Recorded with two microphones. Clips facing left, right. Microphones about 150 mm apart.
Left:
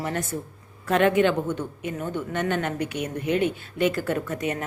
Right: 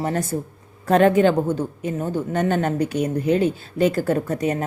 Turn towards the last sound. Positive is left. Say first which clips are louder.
# right 5 dB
turn(degrees=-35)  # may be behind; listen again after turning